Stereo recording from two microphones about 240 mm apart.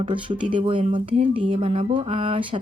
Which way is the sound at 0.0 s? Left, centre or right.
Right.